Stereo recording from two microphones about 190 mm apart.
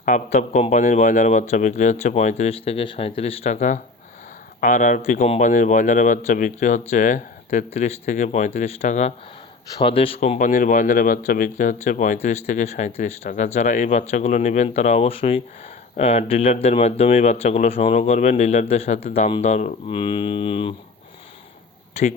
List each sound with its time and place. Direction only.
0.0 s speech: 40° left (ahead or behind)